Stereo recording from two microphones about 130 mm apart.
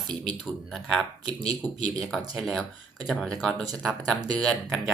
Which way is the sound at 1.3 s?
30° right (ahead or behind).